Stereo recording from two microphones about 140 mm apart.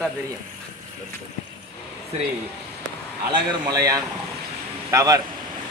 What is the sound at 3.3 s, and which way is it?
Speech, 30° right (ahead or behind).